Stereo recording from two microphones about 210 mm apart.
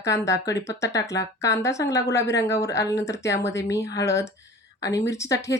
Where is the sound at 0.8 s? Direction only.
15° left (ahead or behind).